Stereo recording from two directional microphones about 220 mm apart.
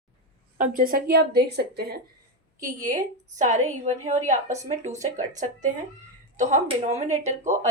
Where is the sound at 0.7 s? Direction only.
40° right (ahead or behind).